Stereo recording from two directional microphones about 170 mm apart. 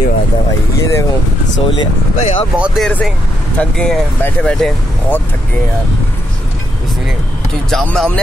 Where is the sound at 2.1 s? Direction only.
40° left (ahead or behind).